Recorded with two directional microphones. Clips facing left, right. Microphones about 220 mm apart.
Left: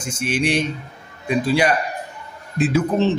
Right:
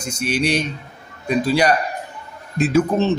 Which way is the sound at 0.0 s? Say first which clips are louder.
Right 1 dB; 40° right (ahead or behind).